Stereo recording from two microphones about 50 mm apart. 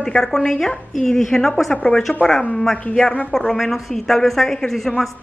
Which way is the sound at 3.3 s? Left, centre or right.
Centre.